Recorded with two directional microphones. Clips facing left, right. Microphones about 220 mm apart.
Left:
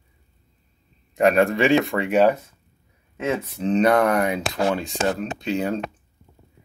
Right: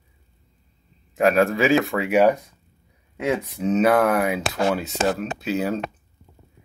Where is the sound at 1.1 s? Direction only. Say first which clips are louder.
Left 1 dB; centre (ahead or behind).